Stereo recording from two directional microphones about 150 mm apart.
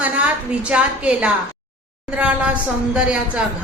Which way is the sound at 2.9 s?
5° right (ahead or behind).